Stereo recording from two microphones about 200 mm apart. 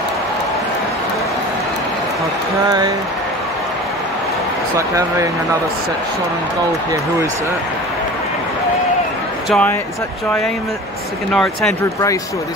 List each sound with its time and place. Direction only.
4.7 s speech: 15° right (ahead or behind)
9.5 s speech: 5° left (ahead or behind)
11.3 s speech: centre (ahead or behind)